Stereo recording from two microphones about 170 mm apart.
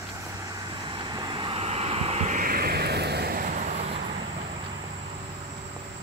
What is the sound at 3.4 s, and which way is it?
Vehicle, 45° right (ahead or behind).